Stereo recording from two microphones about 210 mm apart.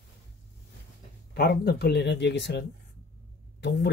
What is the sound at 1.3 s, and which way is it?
Speech, 50° left (ahead or behind).